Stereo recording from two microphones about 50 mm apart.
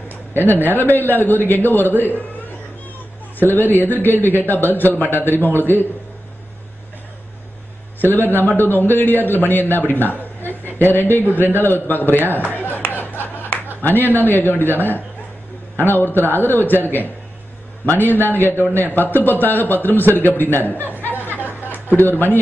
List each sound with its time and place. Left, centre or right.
0.4 s speech: right
0.7 s a man's voice: left
3.3 s a man's voice: left
8.0 s a man's voice: left
12.4 s a sound: left
15.9 s a man's voice: left
21.0 s music: left
21.8 s a man's voice: left